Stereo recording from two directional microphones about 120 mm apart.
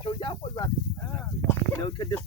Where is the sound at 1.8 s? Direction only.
40° left (ahead or behind).